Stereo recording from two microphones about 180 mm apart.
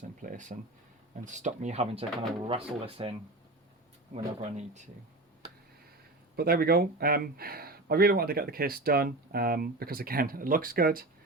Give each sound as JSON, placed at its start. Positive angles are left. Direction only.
{"t": 0.2, "sound": "a sound", "side_deg": -45}
{"t": 1.2, "sound": "speech", "side_deg": -45}
{"t": 4.4, "sound": "speech", "side_deg": -40}
{"t": 6.3, "sound": "speech", "side_deg": -60}